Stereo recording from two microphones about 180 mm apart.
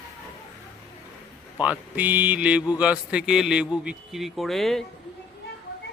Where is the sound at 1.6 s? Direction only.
10° right (ahead or behind).